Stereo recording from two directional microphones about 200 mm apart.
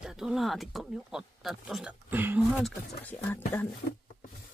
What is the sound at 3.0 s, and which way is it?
Speech, 10° left (ahead or behind).